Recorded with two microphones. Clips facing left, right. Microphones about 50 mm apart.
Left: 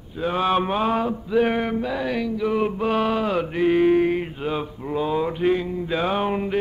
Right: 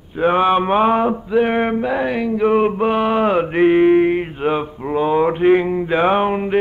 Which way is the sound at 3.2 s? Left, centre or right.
Right.